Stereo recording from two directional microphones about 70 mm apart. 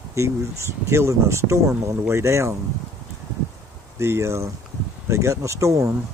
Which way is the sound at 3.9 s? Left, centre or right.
Right.